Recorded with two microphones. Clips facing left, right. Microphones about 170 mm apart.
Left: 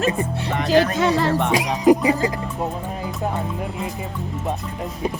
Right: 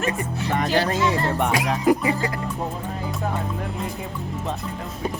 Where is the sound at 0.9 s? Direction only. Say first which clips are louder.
Left 3 dB; 75° left (ahead or behind).